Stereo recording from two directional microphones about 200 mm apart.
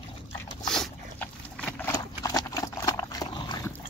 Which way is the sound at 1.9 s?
15° left (ahead or behind).